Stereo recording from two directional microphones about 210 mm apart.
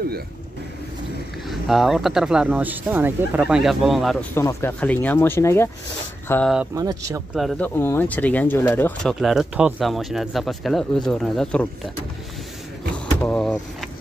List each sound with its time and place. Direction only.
1.5 s speech: centre (ahead or behind)
6.5 s speech: 5° right (ahead or behind)
7.3 s speech: 5° left (ahead or behind)
12.9 s vehicle: 5° left (ahead or behind)